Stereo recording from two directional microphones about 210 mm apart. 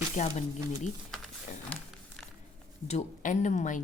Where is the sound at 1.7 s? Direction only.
5° left (ahead or behind).